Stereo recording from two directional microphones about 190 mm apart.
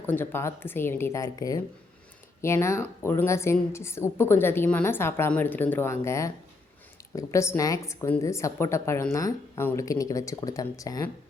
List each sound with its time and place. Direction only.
0.0 s a woman's voice: 10° left (ahead or behind)